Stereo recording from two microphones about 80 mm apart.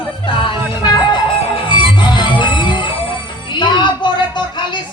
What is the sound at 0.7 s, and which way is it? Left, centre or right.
Music, left.